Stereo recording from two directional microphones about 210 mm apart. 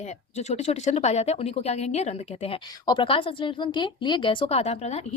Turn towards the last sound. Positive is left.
turn(degrees=30)  # may be behind; listen again after turning